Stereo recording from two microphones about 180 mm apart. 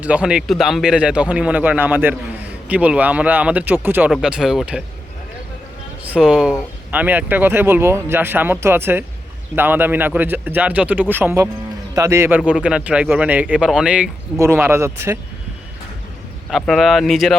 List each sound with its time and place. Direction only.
0.0 s speech: 5° right (ahead or behind)
6.1 s speech: 5° right (ahead or behind)
16.5 s speech: centre (ahead or behind)